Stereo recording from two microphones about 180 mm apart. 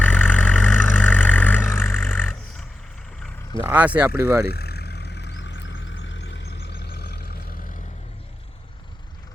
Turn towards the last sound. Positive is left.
turn(degrees=60)  # may be behind; listen again after turning